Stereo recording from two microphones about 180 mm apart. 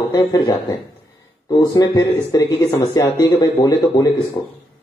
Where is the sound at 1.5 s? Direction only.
20° left (ahead or behind).